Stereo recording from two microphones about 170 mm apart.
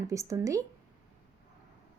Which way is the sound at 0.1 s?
20° right (ahead or behind).